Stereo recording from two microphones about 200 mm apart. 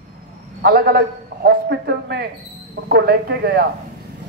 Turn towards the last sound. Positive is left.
turn(degrees=-50)  # may be behind; listen again after turning